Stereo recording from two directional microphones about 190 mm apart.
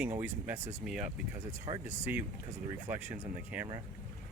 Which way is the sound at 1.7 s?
25° right (ahead or behind).